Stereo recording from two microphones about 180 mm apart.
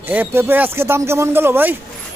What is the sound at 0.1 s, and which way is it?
Speech, 10° right (ahead or behind).